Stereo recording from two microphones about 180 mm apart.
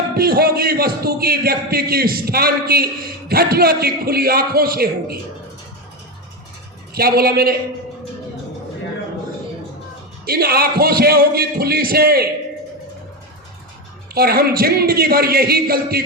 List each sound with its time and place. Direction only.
0.2 s a man's voice: 55° right (ahead or behind)
6.9 s a man's voice: 60° right (ahead or behind)
10.2 s a man's voice: 60° right (ahead or behind)
14.1 s a man's voice: 60° right (ahead or behind)